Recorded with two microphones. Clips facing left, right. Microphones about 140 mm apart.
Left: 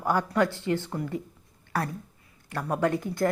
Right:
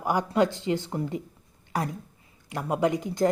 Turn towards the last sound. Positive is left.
turn(degrees=-20)  # may be behind; listen again after turning